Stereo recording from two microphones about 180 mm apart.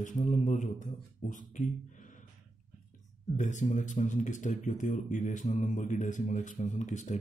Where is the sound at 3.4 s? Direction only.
45° left (ahead or behind).